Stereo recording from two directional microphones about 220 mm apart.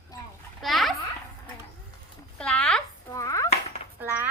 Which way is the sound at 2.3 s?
5° left (ahead or behind).